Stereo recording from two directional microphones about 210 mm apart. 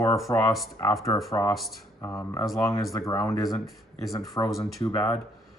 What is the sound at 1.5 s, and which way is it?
Speech, centre (ahead or behind).